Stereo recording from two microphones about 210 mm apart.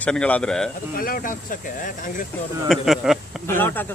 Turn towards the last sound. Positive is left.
turn(degrees=10)  # may be behind; listen again after turning